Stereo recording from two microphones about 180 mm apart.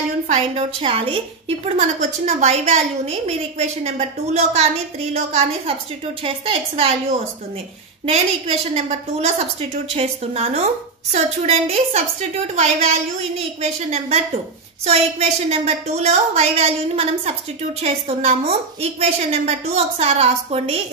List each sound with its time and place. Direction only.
0.3 s a woman's voice: 35° right (ahead or behind)
1.8 s a woman's voice: 40° right (ahead or behind)
8.0 s a woman's voice: 35° right (ahead or behind)
13.6 s a woman's voice: 35° right (ahead or behind)